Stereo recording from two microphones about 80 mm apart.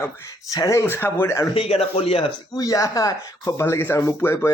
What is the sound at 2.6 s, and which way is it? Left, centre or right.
Speech, left.